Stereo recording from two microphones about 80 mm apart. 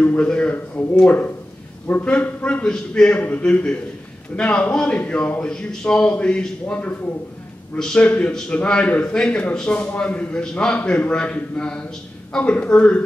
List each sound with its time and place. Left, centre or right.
0.0 s a man's voice: centre